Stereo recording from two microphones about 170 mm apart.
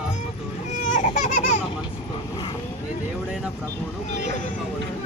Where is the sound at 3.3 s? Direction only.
5° right (ahead or behind).